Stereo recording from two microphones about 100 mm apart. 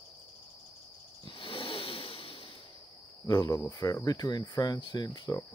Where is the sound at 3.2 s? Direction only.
40° left (ahead or behind).